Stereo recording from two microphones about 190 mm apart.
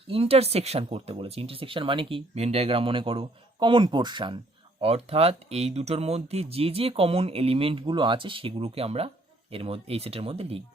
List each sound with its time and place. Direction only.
0.1 s speech: 30° right (ahead or behind)